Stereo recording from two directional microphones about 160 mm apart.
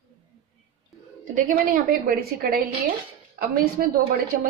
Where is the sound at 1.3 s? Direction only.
65° right (ahead or behind).